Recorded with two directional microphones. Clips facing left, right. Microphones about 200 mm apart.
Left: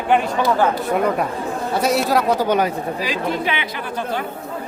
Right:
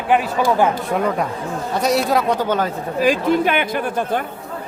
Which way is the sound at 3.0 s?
50° right (ahead or behind).